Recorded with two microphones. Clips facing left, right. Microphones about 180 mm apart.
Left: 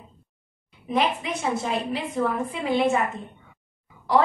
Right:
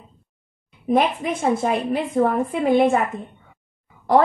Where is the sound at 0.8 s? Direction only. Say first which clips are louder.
Right 5 dB; 50° right (ahead or behind).